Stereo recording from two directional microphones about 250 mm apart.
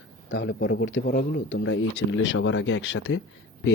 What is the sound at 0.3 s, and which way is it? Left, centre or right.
Speech, left.